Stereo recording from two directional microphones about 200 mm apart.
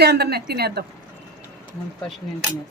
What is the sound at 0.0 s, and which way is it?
Speech, 55° right (ahead or behind).